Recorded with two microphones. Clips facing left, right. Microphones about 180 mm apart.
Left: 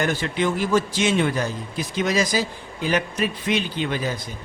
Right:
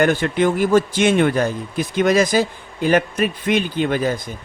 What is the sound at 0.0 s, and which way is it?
A man's voice, 55° right (ahead or behind).